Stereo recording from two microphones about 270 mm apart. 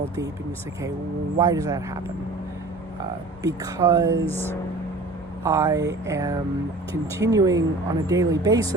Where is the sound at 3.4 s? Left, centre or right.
Centre.